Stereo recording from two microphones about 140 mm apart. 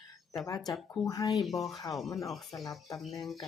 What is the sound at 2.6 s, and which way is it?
Speech, 25° left (ahead or behind).